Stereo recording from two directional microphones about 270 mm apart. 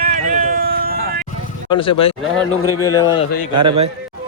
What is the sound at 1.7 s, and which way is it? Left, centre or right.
Speech, centre.